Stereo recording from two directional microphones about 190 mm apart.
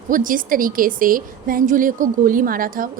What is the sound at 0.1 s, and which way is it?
A woman's voice, 45° right (ahead or behind).